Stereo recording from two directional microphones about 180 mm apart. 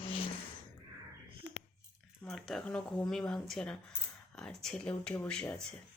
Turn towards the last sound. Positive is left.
turn(degrees=5)  # may be behind; listen again after turning